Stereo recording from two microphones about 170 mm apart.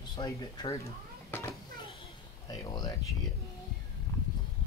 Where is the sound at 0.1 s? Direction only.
20° left (ahead or behind).